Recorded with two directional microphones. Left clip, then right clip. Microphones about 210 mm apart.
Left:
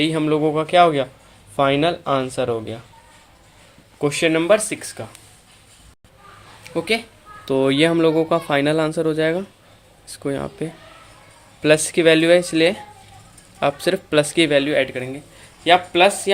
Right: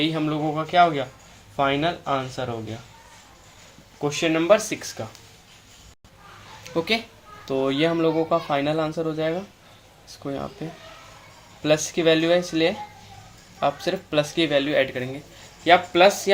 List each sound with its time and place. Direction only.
0.0 s speech: 40° left (ahead or behind)
4.0 s speech: 45° left (ahead or behind); by 5.0 s 20° left (ahead or behind)
6.7 s speech: 20° left (ahead or behind)
7.4 s speech: 35° left (ahead or behind); by 16.3 s 20° left (ahead or behind)